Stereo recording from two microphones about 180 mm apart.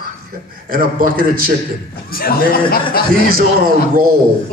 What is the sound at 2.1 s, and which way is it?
Speech, 55° left (ahead or behind).